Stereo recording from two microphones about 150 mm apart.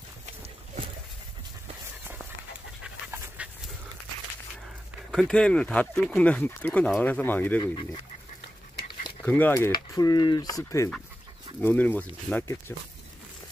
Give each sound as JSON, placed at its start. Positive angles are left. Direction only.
{"t": 3.4, "sound": "dog", "side_deg": -10}
{"t": 5.1, "sound": "speech", "side_deg": 5}
{"t": 7.6, "sound": "speech", "side_deg": 30}
{"t": 9.2, "sound": "speech", "side_deg": 15}
{"t": 9.7, "sound": "speech", "side_deg": 25}
{"t": 11.6, "sound": "speech", "side_deg": 10}